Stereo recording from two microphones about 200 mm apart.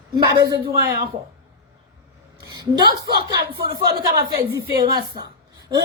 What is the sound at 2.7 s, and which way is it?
Speech, 20° right (ahead or behind).